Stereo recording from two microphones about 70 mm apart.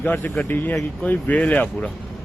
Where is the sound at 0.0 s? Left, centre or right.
Left.